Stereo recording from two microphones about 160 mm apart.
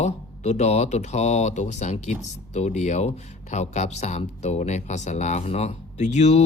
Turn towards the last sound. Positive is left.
turn(degrees=45)  # may be behind; listen again after turning